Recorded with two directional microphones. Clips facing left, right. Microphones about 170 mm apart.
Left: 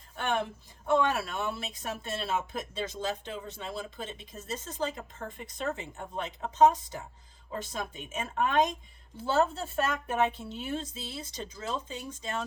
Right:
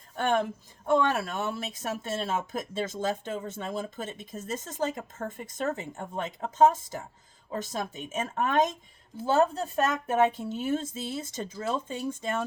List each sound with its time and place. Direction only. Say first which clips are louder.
0.2 s a woman's voice: right 4 dB; 45° right (ahead or behind)